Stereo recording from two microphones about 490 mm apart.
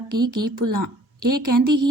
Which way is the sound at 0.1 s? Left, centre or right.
Right.